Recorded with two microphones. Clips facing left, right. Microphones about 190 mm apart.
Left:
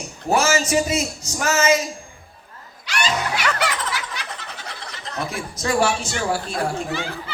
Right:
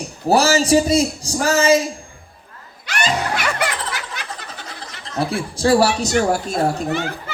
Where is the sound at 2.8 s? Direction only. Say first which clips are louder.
Right 2 dB; 50° right (ahead or behind).